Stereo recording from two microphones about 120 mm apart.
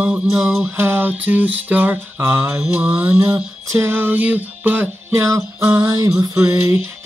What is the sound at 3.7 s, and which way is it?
Music, 20° right (ahead or behind).